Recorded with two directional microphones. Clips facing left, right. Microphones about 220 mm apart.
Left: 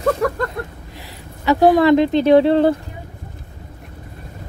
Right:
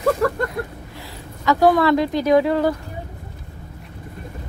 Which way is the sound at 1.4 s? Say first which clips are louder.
Left 3 dB; 20° left (ahead or behind).